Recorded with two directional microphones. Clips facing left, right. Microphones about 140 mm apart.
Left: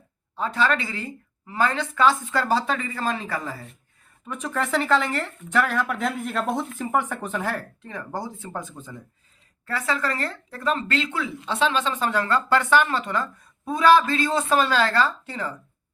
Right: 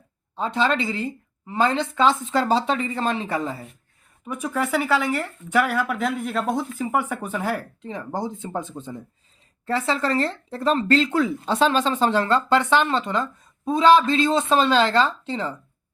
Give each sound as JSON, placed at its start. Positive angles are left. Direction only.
{"t": 0.3, "sound": "speech", "side_deg": -25}
{"t": 4.3, "sound": "speech", "side_deg": -10}